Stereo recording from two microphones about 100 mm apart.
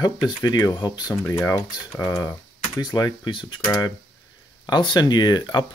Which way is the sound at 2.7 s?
45° left (ahead or behind).